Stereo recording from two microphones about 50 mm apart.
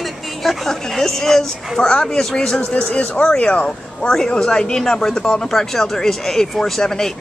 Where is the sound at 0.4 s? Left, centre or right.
Centre.